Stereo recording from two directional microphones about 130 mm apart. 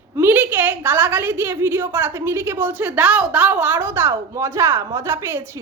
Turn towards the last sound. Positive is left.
turn(degrees=-20)  # may be behind; listen again after turning